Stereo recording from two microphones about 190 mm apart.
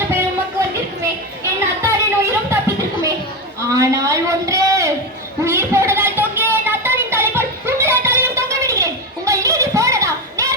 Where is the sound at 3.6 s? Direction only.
15° right (ahead or behind).